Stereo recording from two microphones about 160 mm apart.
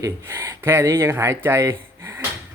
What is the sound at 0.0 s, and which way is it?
Speech, 20° right (ahead or behind).